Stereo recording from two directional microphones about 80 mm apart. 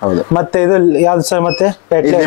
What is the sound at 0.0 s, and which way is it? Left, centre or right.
Speech, left.